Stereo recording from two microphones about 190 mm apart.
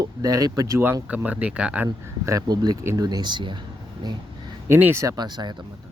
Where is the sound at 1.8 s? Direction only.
20° right (ahead or behind).